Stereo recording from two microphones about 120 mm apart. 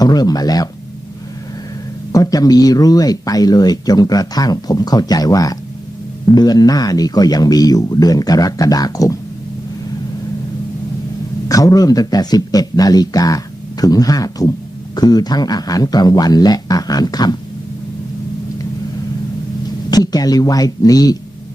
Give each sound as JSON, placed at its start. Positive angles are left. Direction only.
{"t": 0.0, "sound": "speech", "side_deg": 35}
{"t": 2.1, "sound": "speech", "side_deg": 30}
{"t": 11.4, "sound": "speech", "side_deg": 30}
{"t": 19.9, "sound": "speech", "side_deg": 30}